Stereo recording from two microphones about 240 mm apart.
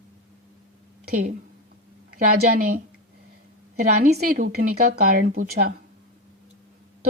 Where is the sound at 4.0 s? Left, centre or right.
Right.